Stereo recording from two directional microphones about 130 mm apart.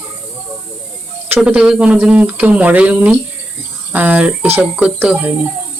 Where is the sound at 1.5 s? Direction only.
5° right (ahead or behind).